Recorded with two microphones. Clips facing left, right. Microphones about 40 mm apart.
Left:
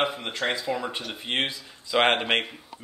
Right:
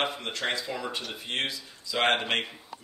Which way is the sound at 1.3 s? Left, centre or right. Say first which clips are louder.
Left 4 dB; left.